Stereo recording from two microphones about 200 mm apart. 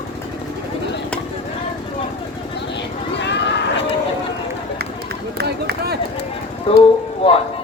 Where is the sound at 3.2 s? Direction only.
60° left (ahead or behind).